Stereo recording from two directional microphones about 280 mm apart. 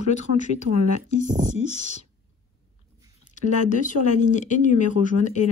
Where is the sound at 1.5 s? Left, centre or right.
Left.